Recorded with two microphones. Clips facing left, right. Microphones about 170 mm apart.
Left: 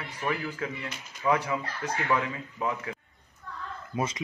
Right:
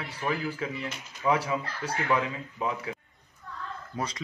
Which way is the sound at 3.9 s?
20° left (ahead or behind).